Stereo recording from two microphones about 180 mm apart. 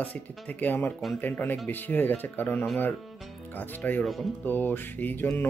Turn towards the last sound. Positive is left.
turn(degrees=10)  # may be behind; listen again after turning